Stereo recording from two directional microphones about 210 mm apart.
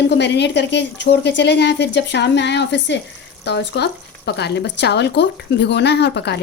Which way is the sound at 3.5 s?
50° left (ahead or behind).